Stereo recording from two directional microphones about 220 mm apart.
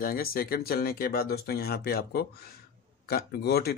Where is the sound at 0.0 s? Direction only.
40° left (ahead or behind).